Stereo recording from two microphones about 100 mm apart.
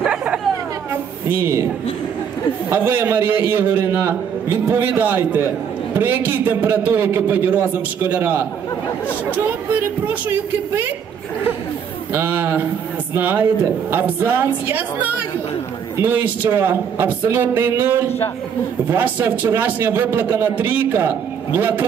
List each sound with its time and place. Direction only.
0.1 s chatter: 15° right (ahead or behind)
1.3 s a man's voice: 25° right (ahead or behind)
2.7 s a man's voice: 20° right (ahead or behind)
12.1 s a man's voice: 20° right (ahead or behind)